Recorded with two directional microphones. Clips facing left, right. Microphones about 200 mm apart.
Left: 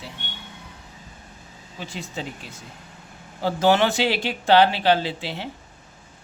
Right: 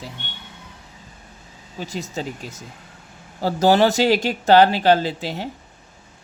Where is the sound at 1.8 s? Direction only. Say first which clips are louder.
Right 4 dB; 40° right (ahead or behind).